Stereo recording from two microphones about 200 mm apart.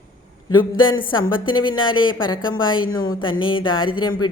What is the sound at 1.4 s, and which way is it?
Speech, 25° left (ahead or behind).